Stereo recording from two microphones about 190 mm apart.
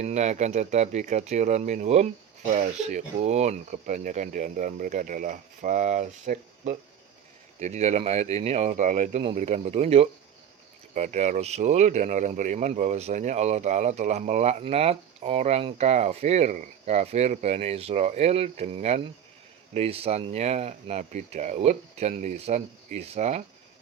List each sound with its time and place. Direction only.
0.0 s speech: 35° right (ahead or behind)